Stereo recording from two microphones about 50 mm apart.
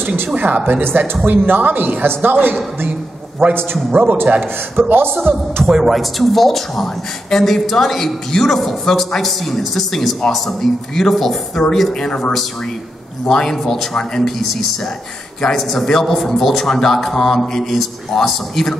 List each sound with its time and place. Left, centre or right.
0.0 s a woman's voice: right
3.4 s a woman's voice: right
5.7 s speech: centre
5.9 s a man's voice: centre
15.4 s speech: centre